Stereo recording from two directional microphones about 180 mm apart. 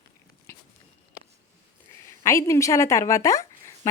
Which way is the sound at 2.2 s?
15° left (ahead or behind).